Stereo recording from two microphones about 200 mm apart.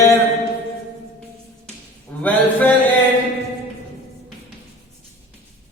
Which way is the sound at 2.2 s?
5° left (ahead or behind).